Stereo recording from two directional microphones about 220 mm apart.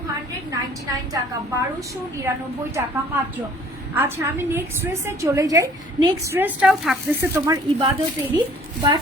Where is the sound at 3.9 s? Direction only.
10° right (ahead or behind).